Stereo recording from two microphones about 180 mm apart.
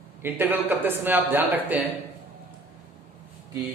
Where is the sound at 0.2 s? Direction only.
10° right (ahead or behind).